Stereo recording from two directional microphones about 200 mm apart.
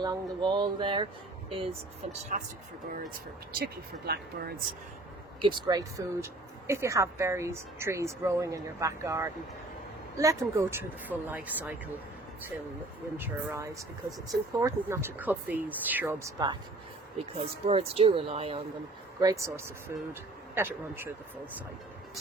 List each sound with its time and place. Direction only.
0.0 s speech: 20° right (ahead or behind)
2.3 s speech: 40° right (ahead or behind)
3.6 s speech: 50° right (ahead or behind)
5.4 s speech: 20° right (ahead or behind)
13.1 s speech: 10° right (ahead or behind)
17.2 s speech: 30° right (ahead or behind)
19.2 s speech: 15° right (ahead or behind)